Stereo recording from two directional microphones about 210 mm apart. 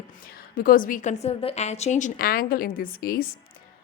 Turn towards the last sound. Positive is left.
turn(degrees=45)  # may be behind; listen again after turning